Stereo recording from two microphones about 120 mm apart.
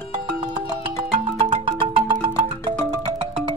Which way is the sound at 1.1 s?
45° right (ahead or behind).